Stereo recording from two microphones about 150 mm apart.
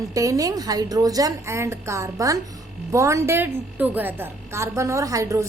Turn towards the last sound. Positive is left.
turn(degrees=-20)  # may be behind; listen again after turning